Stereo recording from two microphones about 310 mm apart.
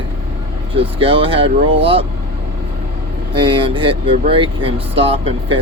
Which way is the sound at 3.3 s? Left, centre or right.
Centre.